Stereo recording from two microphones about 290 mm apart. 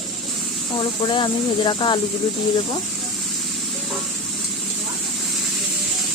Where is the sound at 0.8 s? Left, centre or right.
Centre.